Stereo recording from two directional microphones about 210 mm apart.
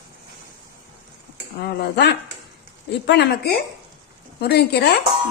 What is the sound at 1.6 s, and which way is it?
Speech, 50° left (ahead or behind).